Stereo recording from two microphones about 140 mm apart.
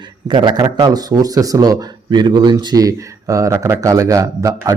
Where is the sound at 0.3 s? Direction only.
35° right (ahead or behind).